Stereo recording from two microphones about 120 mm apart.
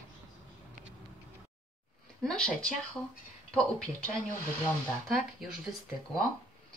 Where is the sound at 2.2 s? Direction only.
5° left (ahead or behind).